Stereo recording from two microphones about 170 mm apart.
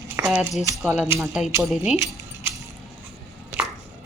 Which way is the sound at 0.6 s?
15° right (ahead or behind).